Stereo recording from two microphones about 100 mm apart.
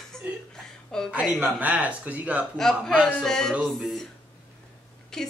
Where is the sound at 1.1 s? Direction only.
15° right (ahead or behind).